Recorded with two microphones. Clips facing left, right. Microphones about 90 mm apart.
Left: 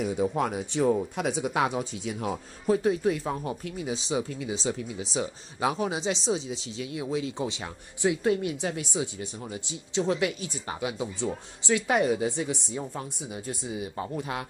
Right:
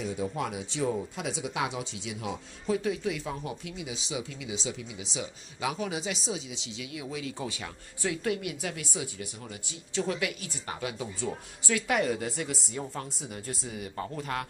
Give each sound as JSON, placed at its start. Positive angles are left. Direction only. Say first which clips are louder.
{"t": 0.0, "sound": "speech", "louder": "left 5 dB", "side_deg": 50}